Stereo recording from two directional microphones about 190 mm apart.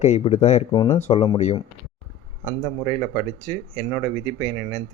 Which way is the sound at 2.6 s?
20° left (ahead or behind).